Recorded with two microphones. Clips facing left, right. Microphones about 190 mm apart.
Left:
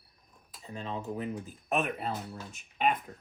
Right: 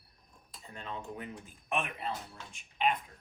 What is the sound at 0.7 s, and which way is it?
Speech, 30° left (ahead or behind).